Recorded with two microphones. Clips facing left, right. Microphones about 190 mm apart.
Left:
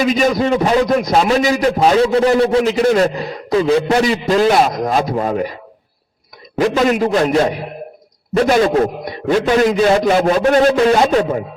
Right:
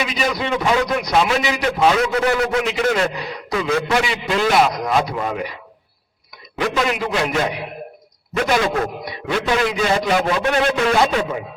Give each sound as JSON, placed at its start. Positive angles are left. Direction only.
{"t": 0.0, "sound": "a man's voice", "side_deg": 45}
{"t": 6.6, "sound": "a man's voice", "side_deg": 40}